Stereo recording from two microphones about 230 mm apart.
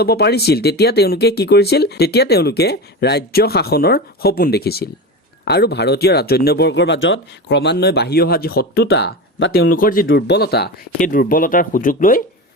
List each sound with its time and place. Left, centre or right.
0.0 s speech: left
10.1 s speech: left